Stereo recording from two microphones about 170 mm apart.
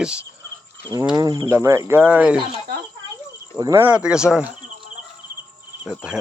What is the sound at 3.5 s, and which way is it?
Speech, 20° right (ahead or behind).